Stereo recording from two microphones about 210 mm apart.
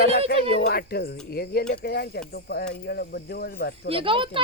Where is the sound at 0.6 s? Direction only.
50° left (ahead or behind).